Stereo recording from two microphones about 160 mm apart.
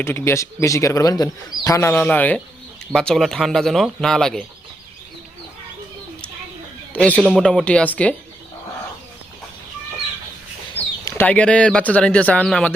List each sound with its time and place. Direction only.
0.0 s speech: 15° left (ahead or behind)
6.9 s speech: 10° left (ahead or behind)
11.0 s speech: 15° left (ahead or behind)